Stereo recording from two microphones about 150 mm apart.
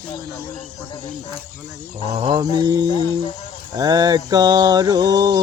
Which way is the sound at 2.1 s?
30° right (ahead or behind).